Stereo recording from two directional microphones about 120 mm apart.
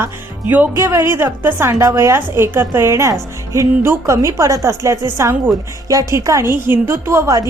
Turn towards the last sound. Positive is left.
turn(degrees=-25)  # may be behind; listen again after turning